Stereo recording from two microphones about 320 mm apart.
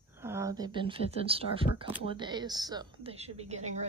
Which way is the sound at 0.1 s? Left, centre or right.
Centre.